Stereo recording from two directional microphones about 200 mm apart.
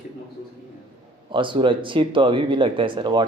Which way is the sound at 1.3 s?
25° right (ahead or behind).